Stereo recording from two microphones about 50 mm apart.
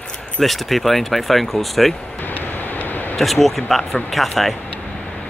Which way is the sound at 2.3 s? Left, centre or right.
Left.